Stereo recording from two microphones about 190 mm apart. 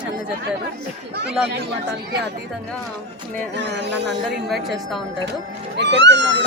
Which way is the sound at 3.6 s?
65° right (ahead or behind).